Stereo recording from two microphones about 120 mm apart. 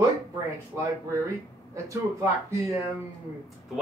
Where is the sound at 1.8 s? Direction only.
25° right (ahead or behind).